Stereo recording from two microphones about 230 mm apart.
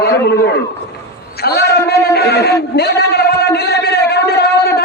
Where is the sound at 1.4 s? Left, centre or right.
Left.